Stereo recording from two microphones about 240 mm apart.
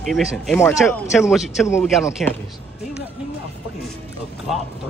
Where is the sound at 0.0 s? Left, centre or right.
Centre.